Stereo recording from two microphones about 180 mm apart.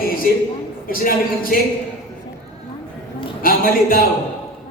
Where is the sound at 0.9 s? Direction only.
50° left (ahead or behind).